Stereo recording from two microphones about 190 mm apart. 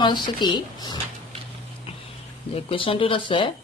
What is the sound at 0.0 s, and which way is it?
Speech, 25° left (ahead or behind).